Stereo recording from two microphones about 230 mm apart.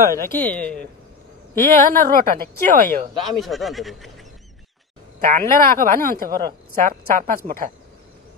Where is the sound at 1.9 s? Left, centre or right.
Right.